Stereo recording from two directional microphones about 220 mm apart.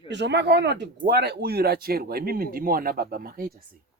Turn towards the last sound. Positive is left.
turn(degrees=-40)  # may be behind; listen again after turning